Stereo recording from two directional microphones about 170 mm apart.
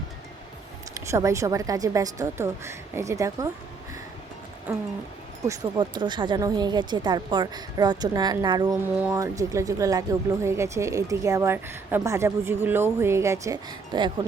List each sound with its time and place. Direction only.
0.9 s a woman's voice: 20° right (ahead or behind)
4.7 s speech: 10° right (ahead or behind)
5.5 s a woman's voice: 25° right (ahead or behind)
8.7 s speech: 10° right (ahead or behind)
9.1 s speech: 20° right (ahead or behind)